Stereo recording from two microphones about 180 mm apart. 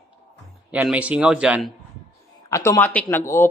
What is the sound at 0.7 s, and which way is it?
Speech, 5° right (ahead or behind).